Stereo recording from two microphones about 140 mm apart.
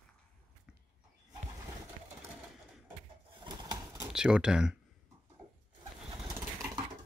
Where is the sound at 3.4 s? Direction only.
25° right (ahead or behind).